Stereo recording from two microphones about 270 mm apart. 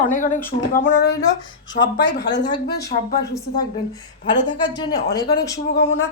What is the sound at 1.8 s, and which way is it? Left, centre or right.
Speech, left.